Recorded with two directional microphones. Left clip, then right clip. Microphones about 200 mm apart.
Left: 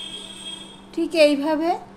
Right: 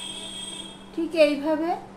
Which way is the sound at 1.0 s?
60° left (ahead or behind).